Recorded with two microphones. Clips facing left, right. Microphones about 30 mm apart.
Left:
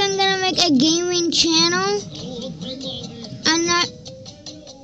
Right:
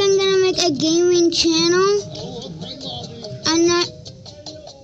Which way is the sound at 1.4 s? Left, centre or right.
Left.